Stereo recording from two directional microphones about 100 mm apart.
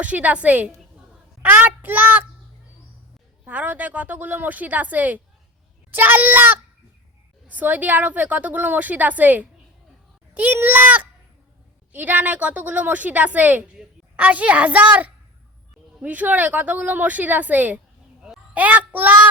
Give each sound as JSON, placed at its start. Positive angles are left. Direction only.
{"t": 0.0, "sound": "a woman's voice", "side_deg": -15}
{"t": 1.4, "sound": "child singing", "side_deg": -20}
{"t": 3.4, "sound": "a woman's voice", "side_deg": -15}